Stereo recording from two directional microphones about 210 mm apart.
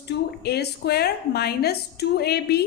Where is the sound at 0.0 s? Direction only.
50° left (ahead or behind).